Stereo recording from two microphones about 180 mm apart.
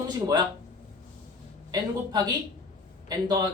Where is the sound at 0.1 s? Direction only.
25° right (ahead or behind).